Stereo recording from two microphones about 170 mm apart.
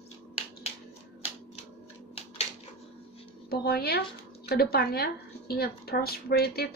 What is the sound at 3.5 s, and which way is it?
A woman's voice, 65° left (ahead or behind).